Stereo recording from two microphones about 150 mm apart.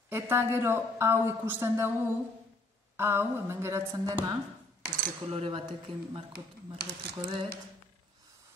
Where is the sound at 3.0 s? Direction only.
15° right (ahead or behind).